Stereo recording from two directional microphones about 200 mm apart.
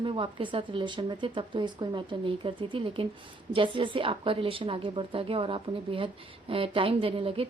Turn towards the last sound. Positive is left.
turn(degrees=-30)  # may be behind; listen again after turning